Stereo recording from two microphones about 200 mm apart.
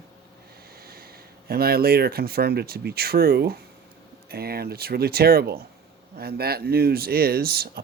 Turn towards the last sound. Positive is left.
turn(degrees=-50)  # may be behind; listen again after turning